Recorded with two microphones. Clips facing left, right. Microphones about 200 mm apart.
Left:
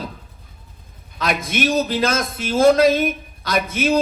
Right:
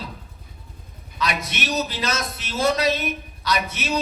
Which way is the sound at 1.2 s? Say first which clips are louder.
Left 6 dB; 50° left (ahead or behind).